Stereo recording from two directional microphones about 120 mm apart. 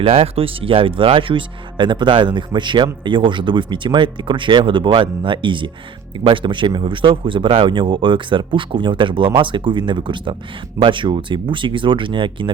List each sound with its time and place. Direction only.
0.0 s speech: 50° right (ahead or behind)